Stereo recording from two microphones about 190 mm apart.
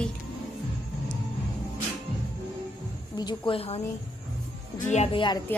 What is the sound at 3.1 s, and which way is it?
A woman's voice, 20° left (ahead or behind).